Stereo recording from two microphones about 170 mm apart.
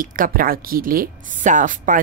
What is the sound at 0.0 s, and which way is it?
Speech, 55° right (ahead or behind).